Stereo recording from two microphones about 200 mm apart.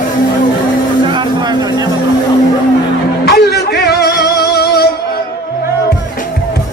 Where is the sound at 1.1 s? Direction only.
20° right (ahead or behind).